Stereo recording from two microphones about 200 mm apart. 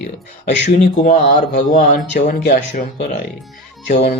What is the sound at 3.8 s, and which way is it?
Speech, 35° left (ahead or behind).